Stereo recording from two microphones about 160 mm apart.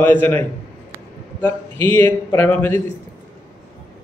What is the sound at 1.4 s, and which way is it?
A man's voice, 15° left (ahead or behind).